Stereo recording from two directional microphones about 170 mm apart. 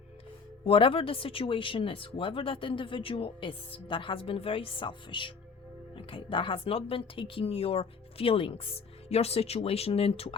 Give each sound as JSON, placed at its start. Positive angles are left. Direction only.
{"t": 0.6, "sound": "speech", "side_deg": 30}